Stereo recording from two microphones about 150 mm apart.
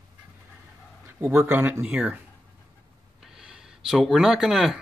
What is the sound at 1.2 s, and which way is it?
Speech, 15° right (ahead or behind).